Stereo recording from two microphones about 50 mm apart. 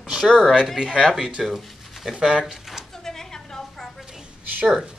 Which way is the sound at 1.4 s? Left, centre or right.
Centre.